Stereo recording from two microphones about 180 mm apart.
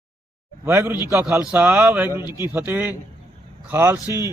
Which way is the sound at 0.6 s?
15° right (ahead or behind).